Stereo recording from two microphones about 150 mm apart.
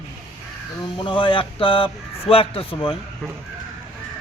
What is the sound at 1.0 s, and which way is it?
Speech, 35° left (ahead or behind).